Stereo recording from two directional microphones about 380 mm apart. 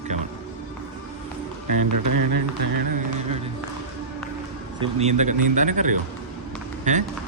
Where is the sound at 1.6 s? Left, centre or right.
Right.